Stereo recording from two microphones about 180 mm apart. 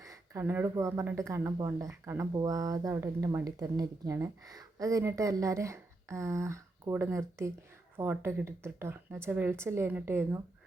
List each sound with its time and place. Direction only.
0.0 s speech: 15° right (ahead or behind)